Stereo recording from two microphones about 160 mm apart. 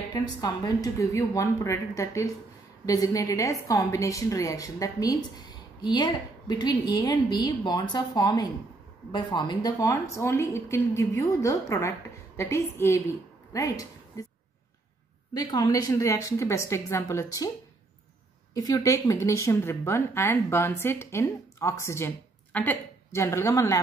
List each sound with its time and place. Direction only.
0.1 s a woman's voice: 25° left (ahead or behind)
15.3 s a woman's voice: 25° left (ahead or behind)
18.5 s speech: 25° left (ahead or behind)